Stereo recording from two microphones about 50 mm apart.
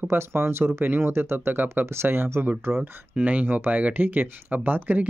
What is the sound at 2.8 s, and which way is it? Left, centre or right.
Speech, right.